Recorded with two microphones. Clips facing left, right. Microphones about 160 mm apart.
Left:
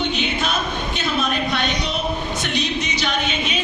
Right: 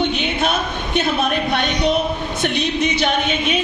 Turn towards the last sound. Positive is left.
turn(degrees=-55)  # may be behind; listen again after turning